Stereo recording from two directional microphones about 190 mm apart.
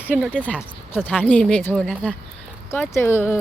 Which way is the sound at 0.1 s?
10° right (ahead or behind).